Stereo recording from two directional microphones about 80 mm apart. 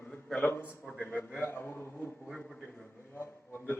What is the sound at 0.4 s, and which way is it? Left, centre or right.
A man's voice, left.